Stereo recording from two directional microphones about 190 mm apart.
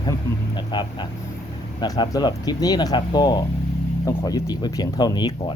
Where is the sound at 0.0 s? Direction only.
25° left (ahead or behind).